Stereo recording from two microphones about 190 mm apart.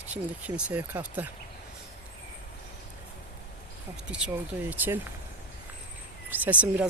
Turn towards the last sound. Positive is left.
turn(degrees=-5)  # may be behind; listen again after turning